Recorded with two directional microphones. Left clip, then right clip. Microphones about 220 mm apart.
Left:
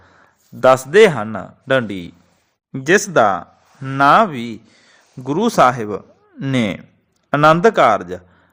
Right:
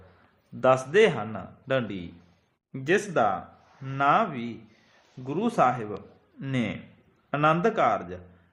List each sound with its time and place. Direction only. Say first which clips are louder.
0.6 s a man's voice: left 10 dB; 45° left (ahead or behind)